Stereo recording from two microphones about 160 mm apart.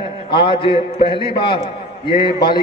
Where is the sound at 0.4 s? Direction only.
30° left (ahead or behind).